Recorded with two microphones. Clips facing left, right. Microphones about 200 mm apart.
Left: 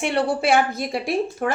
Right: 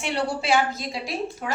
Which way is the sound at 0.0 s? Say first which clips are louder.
Left 5 dB; 55° left (ahead or behind).